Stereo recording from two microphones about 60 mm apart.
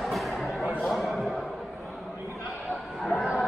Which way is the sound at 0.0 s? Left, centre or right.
Centre.